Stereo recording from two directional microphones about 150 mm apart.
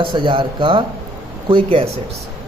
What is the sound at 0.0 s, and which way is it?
A man's voice, 35° right (ahead or behind).